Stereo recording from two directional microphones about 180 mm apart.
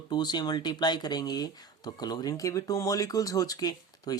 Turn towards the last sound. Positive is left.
turn(degrees=20)  # may be behind; listen again after turning